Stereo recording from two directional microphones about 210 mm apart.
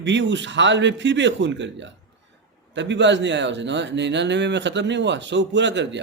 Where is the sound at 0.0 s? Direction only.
60° right (ahead or behind).